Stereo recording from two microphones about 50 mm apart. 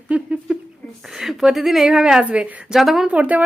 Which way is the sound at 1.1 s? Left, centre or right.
Centre.